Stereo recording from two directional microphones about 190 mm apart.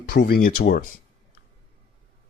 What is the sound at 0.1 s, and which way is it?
Speech, 55° left (ahead or behind).